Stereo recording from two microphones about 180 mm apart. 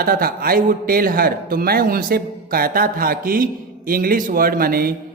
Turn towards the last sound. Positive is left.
turn(degrees=-55)  # may be behind; listen again after turning